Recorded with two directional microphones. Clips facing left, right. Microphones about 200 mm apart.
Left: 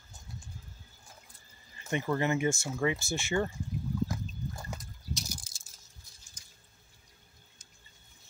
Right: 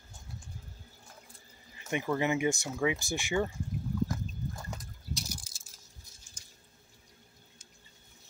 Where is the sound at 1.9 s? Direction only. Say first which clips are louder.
Even; 10° right (ahead or behind).